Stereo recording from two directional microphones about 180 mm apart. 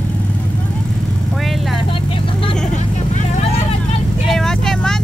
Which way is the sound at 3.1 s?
40° left (ahead or behind).